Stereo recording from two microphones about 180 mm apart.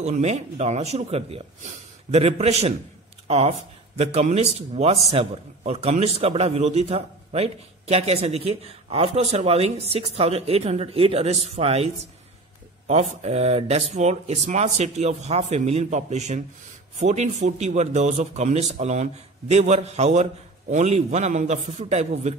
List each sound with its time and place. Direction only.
0.0 s a man's voice: 40° right (ahead or behind)